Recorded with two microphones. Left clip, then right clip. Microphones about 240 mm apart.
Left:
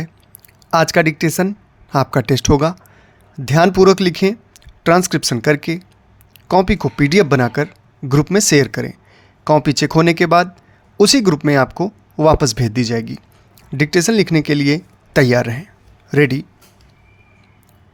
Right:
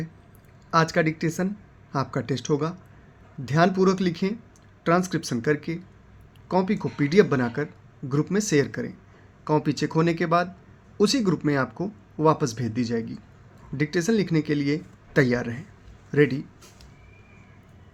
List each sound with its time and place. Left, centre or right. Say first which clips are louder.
0.7 s speech: left 9 dB; left